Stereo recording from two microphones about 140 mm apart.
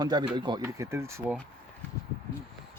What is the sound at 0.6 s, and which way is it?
Speech, 20° right (ahead or behind).